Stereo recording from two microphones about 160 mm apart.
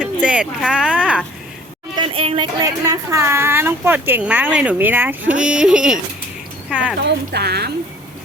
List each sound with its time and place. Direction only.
0.0 s speech: 5° right (ahead or behind)
2.0 s speech: 35° right (ahead or behind)
2.6 s speech: 20° right (ahead or behind)
7.0 s speech: 90° right